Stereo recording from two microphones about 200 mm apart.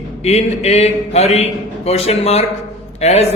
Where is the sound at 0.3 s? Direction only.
35° left (ahead or behind).